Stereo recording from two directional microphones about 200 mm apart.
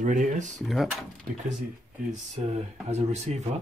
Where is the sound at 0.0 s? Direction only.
40° right (ahead or behind).